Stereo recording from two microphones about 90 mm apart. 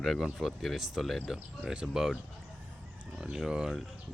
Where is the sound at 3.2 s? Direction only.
5° right (ahead or behind).